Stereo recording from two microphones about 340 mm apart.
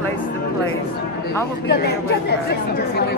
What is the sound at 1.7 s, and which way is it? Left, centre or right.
Speech, left.